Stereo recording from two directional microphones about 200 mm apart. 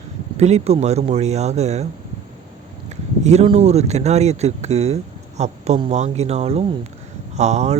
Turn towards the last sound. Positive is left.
turn(degrees=-35)  # may be behind; listen again after turning